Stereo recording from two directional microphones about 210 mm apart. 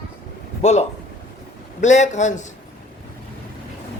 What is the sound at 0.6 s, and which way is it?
A man's voice, 35° left (ahead or behind).